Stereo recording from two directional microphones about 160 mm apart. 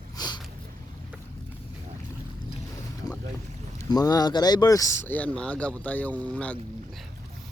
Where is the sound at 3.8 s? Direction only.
25° left (ahead or behind).